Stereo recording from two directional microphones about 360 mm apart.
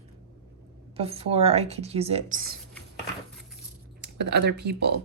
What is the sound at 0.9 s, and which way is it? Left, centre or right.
A woman's voice, centre.